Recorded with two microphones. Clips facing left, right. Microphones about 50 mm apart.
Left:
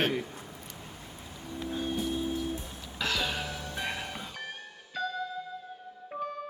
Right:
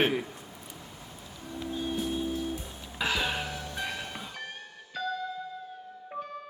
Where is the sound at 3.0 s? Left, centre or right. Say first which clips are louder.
Right 2 dB; centre.